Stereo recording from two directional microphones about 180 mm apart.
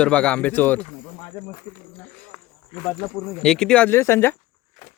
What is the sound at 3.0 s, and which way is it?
Speech, 5° left (ahead or behind).